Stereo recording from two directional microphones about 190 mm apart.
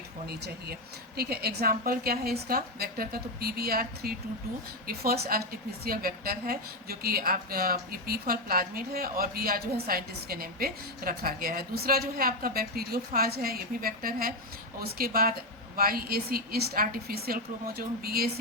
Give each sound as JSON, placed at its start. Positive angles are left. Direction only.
{"t": 1.1, "sound": "a woman's voice", "side_deg": -55}